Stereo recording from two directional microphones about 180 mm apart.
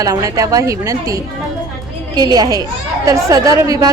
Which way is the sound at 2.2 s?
20° right (ahead or behind).